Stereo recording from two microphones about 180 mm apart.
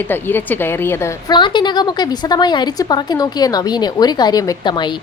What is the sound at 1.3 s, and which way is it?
A woman's voice, 25° left (ahead or behind).